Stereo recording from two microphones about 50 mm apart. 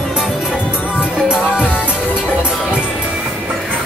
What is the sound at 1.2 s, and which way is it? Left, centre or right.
Music, centre.